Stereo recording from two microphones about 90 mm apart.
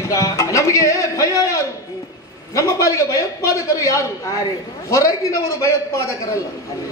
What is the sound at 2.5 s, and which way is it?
A man's voice, 35° left (ahead or behind).